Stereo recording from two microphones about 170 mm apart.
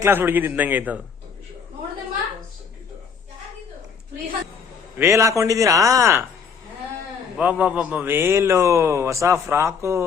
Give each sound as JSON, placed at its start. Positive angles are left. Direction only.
{"t": 0.0, "sound": "a man's voice", "side_deg": -10}
{"t": 4.9, "sound": "a man's voice", "side_deg": -15}
{"t": 7.3, "sound": "a man's voice", "side_deg": -10}